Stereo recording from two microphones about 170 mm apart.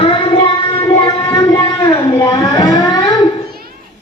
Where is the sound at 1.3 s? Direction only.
25° left (ahead or behind).